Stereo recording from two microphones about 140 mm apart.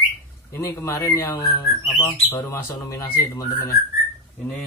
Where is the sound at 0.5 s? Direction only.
20° left (ahead or behind).